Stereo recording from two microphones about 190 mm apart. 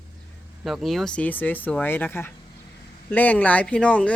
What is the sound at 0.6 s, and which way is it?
Speech, centre (ahead or behind).